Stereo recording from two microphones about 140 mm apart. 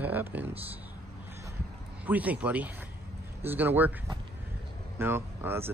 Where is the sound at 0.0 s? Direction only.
15° right (ahead or behind).